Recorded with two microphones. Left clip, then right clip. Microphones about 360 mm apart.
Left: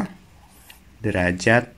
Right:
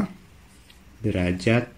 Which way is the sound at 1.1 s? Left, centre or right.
Centre.